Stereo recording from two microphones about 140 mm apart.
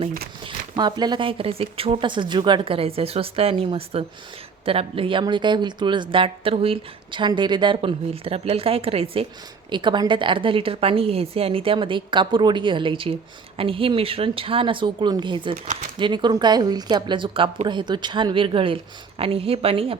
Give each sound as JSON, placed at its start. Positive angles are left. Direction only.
{"t": 0.4, "sound": "a woman's voice", "side_deg": -30}